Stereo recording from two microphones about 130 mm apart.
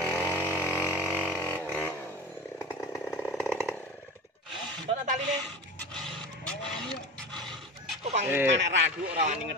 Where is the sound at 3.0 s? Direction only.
10° left (ahead or behind).